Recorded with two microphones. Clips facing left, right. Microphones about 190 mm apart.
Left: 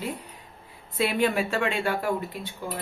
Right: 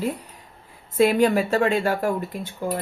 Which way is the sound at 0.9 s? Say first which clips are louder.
Right 7 dB; 45° right (ahead or behind).